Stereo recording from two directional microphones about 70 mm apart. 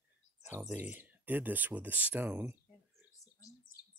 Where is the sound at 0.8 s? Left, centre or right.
Right.